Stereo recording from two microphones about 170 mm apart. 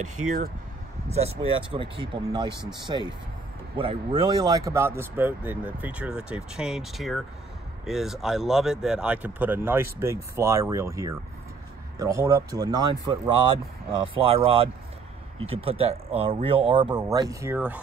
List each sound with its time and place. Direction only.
1.0 s speech: 40° right (ahead or behind); by 17.6 s 20° right (ahead or behind)